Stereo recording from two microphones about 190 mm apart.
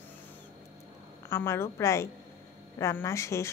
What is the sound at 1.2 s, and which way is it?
Speech, 15° left (ahead or behind).